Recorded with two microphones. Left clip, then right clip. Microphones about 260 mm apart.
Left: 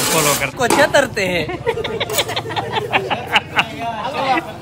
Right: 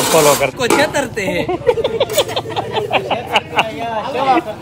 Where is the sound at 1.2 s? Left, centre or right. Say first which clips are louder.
Right 1 dB; left.